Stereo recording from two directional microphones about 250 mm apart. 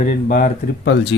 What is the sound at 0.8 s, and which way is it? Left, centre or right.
Speech, left.